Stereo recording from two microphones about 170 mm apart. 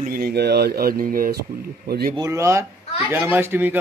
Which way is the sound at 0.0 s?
60° right (ahead or behind).